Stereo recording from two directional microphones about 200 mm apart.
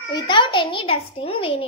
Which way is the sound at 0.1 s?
25° left (ahead or behind).